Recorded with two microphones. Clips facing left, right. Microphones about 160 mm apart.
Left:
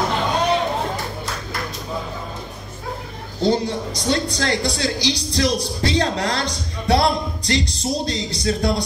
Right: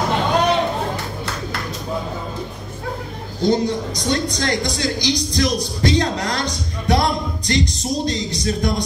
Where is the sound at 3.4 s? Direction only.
30° left (ahead or behind).